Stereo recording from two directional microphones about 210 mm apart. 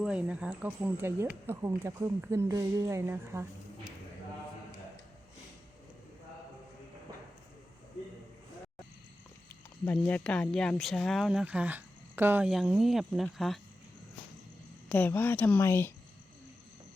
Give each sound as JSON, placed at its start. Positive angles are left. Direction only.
{"t": 0.0, "sound": "speech", "side_deg": -5}
{"t": 9.8, "sound": "speech", "side_deg": 5}
{"t": 14.8, "sound": "speech", "side_deg": 10}